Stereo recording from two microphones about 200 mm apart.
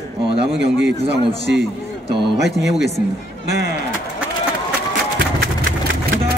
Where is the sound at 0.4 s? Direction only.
60° right (ahead or behind).